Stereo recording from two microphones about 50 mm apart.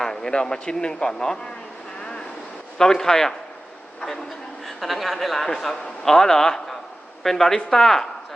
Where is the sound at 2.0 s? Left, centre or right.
Centre.